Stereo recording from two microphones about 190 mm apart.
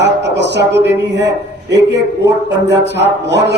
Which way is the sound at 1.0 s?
65° right (ahead or behind).